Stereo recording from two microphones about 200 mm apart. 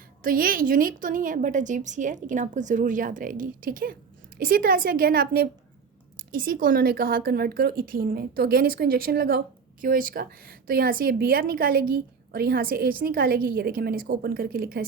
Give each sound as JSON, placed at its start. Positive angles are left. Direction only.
{"t": 0.2, "sound": "a woman's voice", "side_deg": -45}